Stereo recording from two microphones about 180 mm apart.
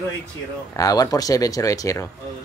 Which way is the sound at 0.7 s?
20° left (ahead or behind).